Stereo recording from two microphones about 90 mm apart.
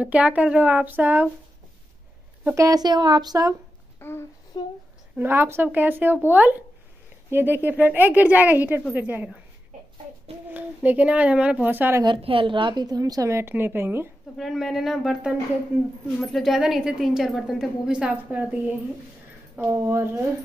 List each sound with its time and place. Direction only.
0.0 s speech: 15° right (ahead or behind)
2.5 s a woman's voice: 35° right (ahead or behind)
2.8 s a woman's voice: 50° right (ahead or behind)
4.0 s a sound: 25° left (ahead or behind)
4.5 s a sound: 60° left (ahead or behind)
5.1 s speech: 25° right (ahead or behind)
10.5 s speech: 20° right (ahead or behind)
12.0 s a woman's voice: 75° right (ahead or behind); by 14.0 s 25° right (ahead or behind)
14.3 s a woman's voice: centre (ahead or behind)
19.7 s speech: 30° right (ahead or behind)